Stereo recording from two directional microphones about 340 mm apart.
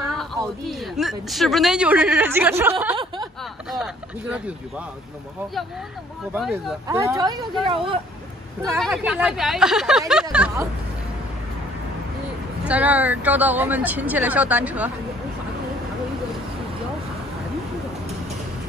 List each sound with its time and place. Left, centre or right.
0.4 s a man's voice: centre
6.3 s speech: centre
8.6 s a man's voice: centre
12.6 s a man's voice: centre